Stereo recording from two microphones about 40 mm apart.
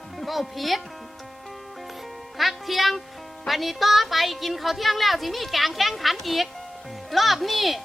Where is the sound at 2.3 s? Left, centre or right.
Centre.